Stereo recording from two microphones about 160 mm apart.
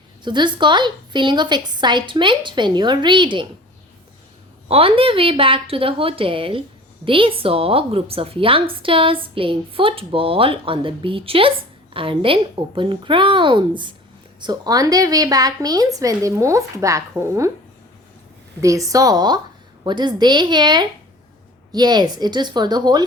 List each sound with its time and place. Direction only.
0.3 s a woman's voice: 30° right (ahead or behind)
4.7 s a woman's voice: 35° right (ahead or behind); by 17.5 s 20° right (ahead or behind)
18.6 s a woman's voice: 20° right (ahead or behind)